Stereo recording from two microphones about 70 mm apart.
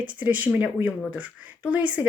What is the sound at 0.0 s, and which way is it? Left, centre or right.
Speech, right.